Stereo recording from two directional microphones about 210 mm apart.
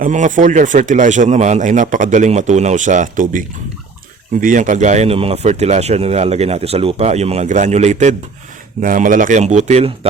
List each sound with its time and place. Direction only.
0.0 s speech: 35° right (ahead or behind)